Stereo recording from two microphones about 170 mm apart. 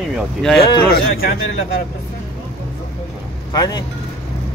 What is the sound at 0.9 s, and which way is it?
Speech, 65° left (ahead or behind).